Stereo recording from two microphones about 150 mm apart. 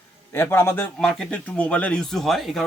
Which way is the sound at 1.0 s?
5° left (ahead or behind).